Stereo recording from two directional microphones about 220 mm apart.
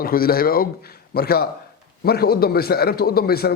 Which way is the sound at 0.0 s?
40° left (ahead or behind).